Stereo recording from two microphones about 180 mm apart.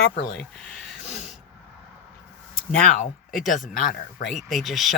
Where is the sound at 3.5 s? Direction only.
45° left (ahead or behind).